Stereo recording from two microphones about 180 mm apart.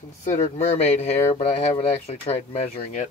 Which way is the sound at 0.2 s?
40° left (ahead or behind).